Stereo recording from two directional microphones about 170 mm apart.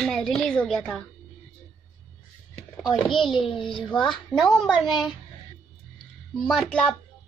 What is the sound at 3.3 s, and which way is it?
Speech, 30° left (ahead or behind).